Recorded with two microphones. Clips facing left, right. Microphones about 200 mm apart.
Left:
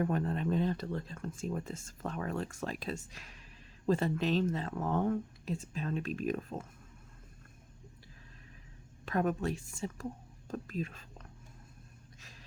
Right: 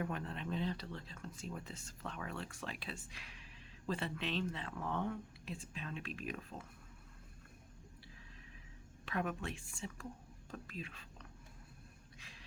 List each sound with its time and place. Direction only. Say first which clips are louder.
0.0 s speech: left 9 dB; 45° left (ahead or behind)
9.0 s speech: left 8 dB; 40° left (ahead or behind)
12.2 s a sound: left 2 dB; 40° left (ahead or behind)